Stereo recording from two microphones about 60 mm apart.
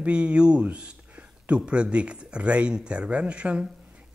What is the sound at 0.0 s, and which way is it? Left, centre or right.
Speech, centre.